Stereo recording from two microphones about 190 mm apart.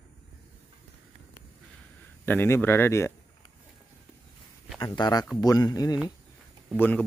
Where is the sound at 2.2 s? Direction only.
10° left (ahead or behind).